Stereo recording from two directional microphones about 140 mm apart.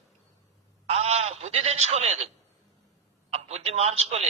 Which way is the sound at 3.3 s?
50° right (ahead or behind).